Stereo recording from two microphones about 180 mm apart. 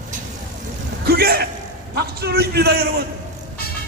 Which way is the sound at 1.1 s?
60° right (ahead or behind).